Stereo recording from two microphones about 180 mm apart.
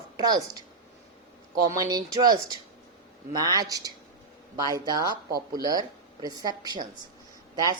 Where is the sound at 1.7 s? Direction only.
20° right (ahead or behind).